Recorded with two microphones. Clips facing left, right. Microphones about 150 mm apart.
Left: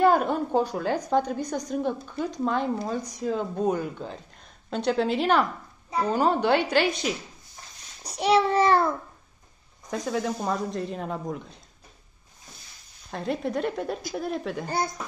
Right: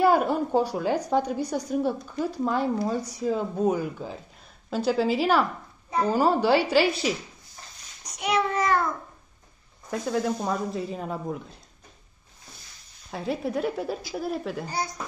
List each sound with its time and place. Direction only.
0.0 s speech: 10° right (ahead or behind)
8.0 s a child's voice: 30° left (ahead or behind)
9.8 s speech: centre (ahead or behind)
13.1 s speech: 5° right (ahead or behind)
14.7 s a woman's voice: 55° left (ahead or behind)